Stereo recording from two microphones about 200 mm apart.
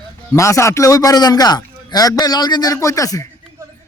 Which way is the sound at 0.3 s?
15° left (ahead or behind).